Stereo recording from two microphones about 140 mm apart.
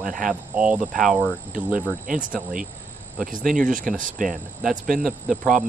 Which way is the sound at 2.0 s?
75° right (ahead or behind).